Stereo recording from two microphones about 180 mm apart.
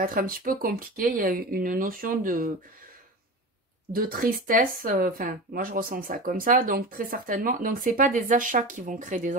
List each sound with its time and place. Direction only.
0.0 s speech: 55° right (ahead or behind)
3.9 s speech: 55° right (ahead or behind)